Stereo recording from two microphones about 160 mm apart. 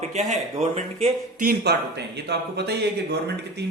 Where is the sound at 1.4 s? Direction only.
80° right.